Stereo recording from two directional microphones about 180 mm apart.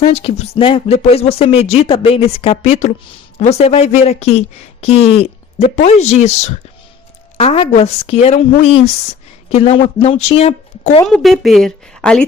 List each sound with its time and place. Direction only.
0.0 s speech: 35° left (ahead or behind)
9.5 s speech: 30° left (ahead or behind)
11.0 s a woman's voice: centre (ahead or behind)